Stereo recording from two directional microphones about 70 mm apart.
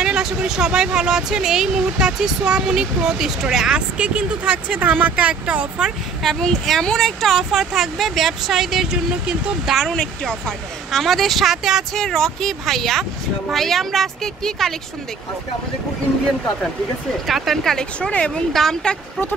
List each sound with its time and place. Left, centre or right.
0.0 s speech: centre
6.4 s speech: centre
9.8 s speech: centre
11.9 s speech: centre
17.3 s speech: centre